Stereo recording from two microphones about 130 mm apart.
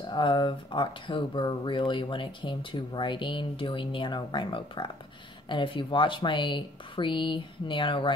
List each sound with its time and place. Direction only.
0.1 s speech: 35° left (ahead or behind)